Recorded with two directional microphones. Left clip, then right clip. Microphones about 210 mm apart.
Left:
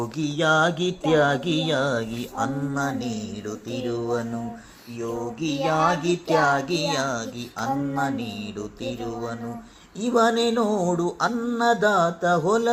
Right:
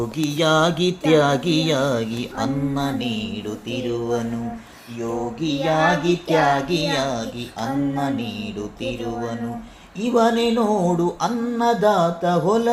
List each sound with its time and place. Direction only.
0.3 s speech: 5° left (ahead or behind)
5.4 s speech: 15° left (ahead or behind)